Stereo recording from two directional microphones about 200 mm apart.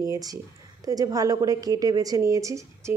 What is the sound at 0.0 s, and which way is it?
A woman's voice, 15° right (ahead or behind).